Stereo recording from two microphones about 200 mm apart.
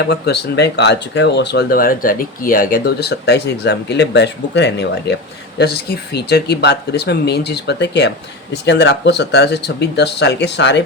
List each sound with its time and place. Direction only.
0.1 s speech: 55° left (ahead or behind)